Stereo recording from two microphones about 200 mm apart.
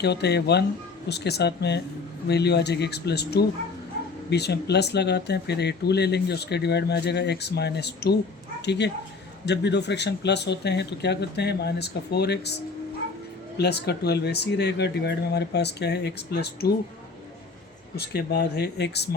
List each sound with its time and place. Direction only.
0.0 s speech: 55° left (ahead or behind)
17.9 s speech: 55° left (ahead or behind)